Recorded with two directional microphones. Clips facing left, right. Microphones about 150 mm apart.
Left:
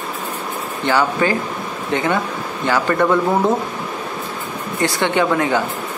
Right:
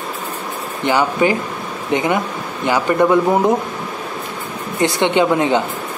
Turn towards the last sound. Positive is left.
turn(degrees=-20)  # may be behind; listen again after turning